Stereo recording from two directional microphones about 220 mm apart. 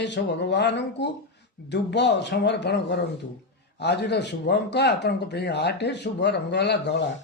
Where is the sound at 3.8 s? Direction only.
50° left (ahead or behind).